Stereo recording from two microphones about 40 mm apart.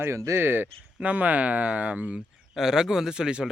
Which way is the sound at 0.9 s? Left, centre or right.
Right.